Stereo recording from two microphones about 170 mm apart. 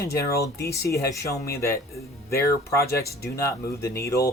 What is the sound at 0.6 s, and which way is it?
Speech, 20° left (ahead or behind).